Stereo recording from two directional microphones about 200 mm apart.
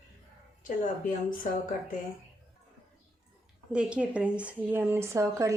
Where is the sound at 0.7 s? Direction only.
40° left (ahead or behind).